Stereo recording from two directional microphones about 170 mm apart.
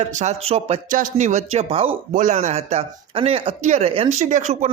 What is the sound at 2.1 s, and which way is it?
Speech, 45° right (ahead or behind).